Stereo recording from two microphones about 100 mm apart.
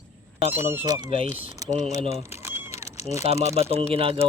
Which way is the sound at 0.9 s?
40° right (ahead or behind).